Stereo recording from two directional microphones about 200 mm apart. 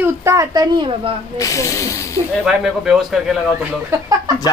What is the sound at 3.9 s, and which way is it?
Speech, 20° right (ahead or behind).